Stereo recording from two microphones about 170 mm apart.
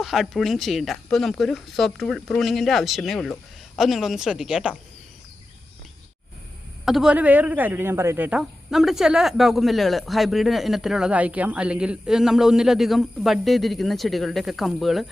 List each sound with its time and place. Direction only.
0.0 s speech: centre (ahead or behind)
6.8 s speech: 5° right (ahead or behind)